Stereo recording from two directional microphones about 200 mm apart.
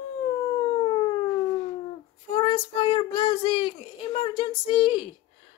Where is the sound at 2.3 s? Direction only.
25° left (ahead or behind).